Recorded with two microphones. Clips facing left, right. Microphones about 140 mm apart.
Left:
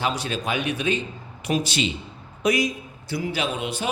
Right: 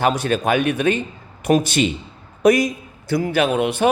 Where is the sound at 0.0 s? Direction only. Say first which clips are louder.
Right 8 dB; 50° right (ahead or behind).